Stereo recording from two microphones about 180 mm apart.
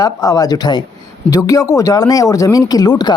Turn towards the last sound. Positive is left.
turn(degrees=25)  # may be behind; listen again after turning